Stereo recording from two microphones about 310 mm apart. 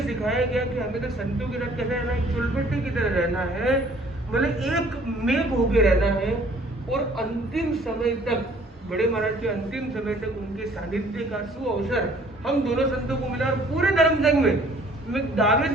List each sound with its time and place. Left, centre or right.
0.0 s a man's voice: centre
11.3 s a man's voice: centre